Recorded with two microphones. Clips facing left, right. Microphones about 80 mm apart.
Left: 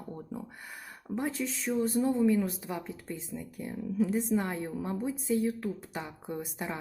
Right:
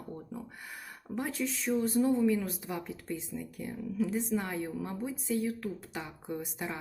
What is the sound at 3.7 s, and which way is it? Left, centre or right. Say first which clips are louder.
Speech: left 3 dB; centre.